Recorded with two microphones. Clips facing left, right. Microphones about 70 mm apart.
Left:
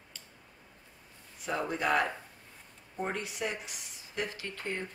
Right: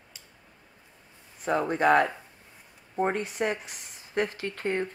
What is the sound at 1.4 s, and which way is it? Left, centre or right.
Speech, right.